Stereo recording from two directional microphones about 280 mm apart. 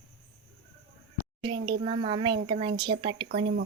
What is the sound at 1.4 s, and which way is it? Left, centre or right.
A woman's voice, centre.